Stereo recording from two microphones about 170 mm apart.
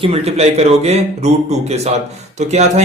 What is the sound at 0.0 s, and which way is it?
A man's voice, 35° right (ahead or behind).